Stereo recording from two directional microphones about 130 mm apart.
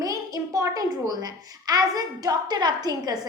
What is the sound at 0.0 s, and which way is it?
A child's voice, 25° right (ahead or behind).